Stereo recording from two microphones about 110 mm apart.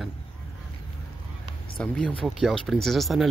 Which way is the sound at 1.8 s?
10° left (ahead or behind).